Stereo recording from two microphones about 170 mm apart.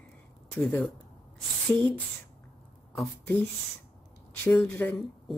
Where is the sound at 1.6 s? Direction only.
5° left (ahead or behind).